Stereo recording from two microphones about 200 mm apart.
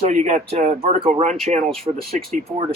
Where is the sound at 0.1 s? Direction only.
35° right (ahead or behind).